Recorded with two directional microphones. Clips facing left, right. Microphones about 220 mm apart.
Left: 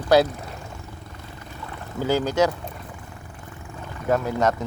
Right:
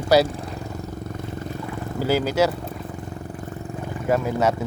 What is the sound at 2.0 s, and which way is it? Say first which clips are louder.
Speech: right 1 dB; 10° right (ahead or behind).